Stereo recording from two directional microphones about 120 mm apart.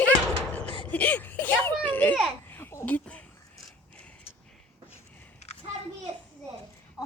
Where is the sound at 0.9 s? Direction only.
10° left (ahead or behind).